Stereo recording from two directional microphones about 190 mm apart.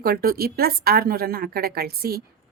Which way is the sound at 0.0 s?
50° right (ahead or behind).